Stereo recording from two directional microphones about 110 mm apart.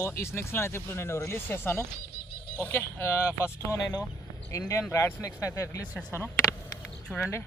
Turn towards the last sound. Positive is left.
turn(degrees=15)  # may be behind; listen again after turning